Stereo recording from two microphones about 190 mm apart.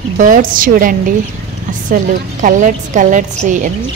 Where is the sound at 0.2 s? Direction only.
45° right (ahead or behind).